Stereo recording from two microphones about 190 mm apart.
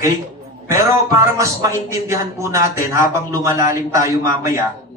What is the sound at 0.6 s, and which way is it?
A man's voice, 15° right (ahead or behind).